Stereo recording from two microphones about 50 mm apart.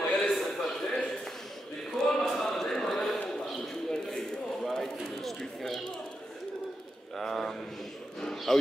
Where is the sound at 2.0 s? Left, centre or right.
Centre.